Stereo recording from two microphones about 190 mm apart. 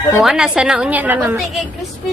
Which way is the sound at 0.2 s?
Centre (ahead or behind).